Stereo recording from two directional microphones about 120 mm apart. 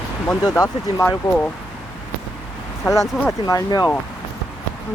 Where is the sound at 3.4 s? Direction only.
30° left (ahead or behind).